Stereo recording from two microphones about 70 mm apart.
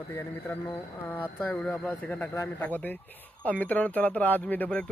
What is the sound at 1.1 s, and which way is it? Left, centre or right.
A man's voice, left.